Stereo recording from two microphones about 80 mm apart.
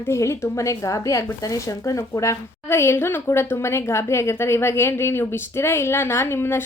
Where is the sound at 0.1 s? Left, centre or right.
Left.